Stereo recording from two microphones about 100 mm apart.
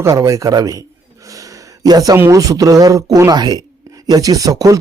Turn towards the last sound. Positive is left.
turn(degrees=-35)  # may be behind; listen again after turning